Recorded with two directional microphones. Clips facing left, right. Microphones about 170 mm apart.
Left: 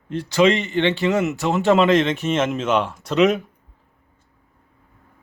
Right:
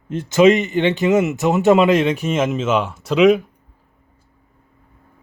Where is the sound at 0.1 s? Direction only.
20° right (ahead or behind); by 3.4 s centre (ahead or behind).